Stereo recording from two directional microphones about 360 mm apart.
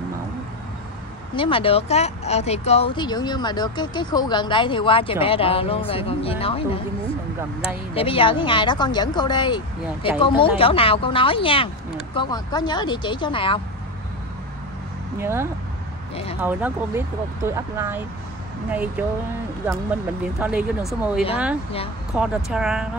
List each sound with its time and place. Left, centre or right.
1.3 s speech: centre
15.1 s speech: centre